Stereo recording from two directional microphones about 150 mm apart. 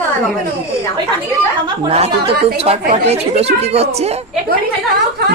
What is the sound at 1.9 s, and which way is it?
Speech, 40° right (ahead or behind).